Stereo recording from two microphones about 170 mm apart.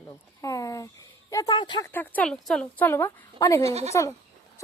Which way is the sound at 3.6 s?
40° right (ahead or behind).